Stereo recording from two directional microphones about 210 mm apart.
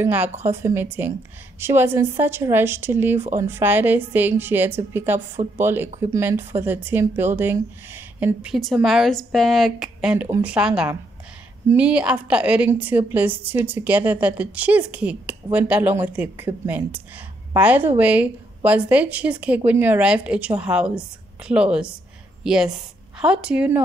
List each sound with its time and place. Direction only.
0.0 s a woman's voice: 10° right (ahead or behind)